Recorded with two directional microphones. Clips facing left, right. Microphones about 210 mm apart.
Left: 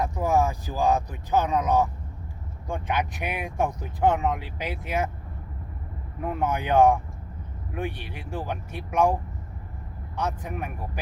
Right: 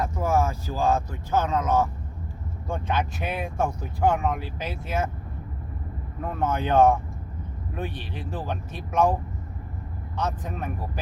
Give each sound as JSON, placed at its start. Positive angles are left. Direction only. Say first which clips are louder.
{"t": 0.0, "sound": "speech", "louder": "left 1 dB", "side_deg": 15}
{"t": 6.2, "sound": "speech", "louder": "even", "side_deg": 15}
{"t": 10.2, "sound": "speech", "louder": "even", "side_deg": 10}